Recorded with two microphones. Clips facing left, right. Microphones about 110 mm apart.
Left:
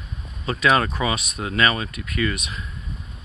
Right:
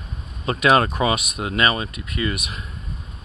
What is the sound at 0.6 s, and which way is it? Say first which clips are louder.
Speech: right 3 dB; 50° right (ahead or behind).